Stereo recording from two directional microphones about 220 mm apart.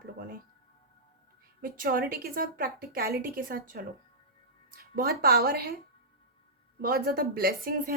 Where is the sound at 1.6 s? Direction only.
40° right (ahead or behind).